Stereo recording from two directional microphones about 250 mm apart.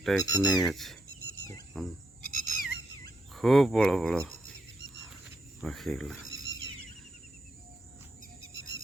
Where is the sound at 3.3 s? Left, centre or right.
Centre.